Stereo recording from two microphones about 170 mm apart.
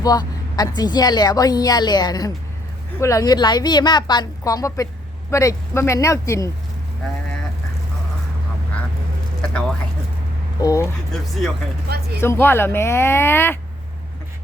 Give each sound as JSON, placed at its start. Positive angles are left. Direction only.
{"t": 0.0, "sound": "vehicle", "side_deg": 25}
{"t": 0.8, "sound": "a woman's voice", "side_deg": 25}
{"t": 9.5, "sound": "a sound", "side_deg": 5}
{"t": 10.6, "sound": "a woman's voice", "side_deg": 20}
{"t": 11.1, "sound": "speech", "side_deg": 0}
{"t": 11.9, "sound": "speech", "side_deg": -70}
{"t": 12.2, "sound": "speech", "side_deg": 15}